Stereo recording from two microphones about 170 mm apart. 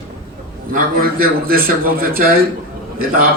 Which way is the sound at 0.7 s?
60° right (ahead or behind).